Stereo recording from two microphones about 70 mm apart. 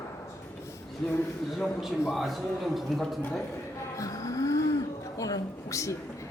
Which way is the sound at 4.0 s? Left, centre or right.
Left.